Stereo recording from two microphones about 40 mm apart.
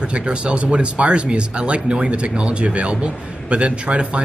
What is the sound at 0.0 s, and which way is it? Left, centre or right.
Speech, right.